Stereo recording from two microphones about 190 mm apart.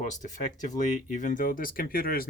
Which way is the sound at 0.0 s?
40° left (ahead or behind).